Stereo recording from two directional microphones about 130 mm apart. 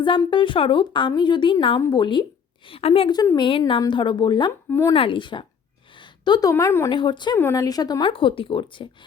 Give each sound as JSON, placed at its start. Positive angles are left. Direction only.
{"t": 0.3, "sound": "a woman's voice", "side_deg": 40}
{"t": 4.7, "sound": "speech", "side_deg": 20}
{"t": 4.9, "sound": "a woman's voice", "side_deg": 40}
{"t": 6.0, "sound": "a sound", "side_deg": 35}
{"t": 6.5, "sound": "speech", "side_deg": 20}
{"t": 6.9, "sound": "a woman's voice", "side_deg": 40}
{"t": 7.3, "sound": "speech", "side_deg": 20}
{"t": 8.1, "sound": "a woman's voice", "side_deg": 40}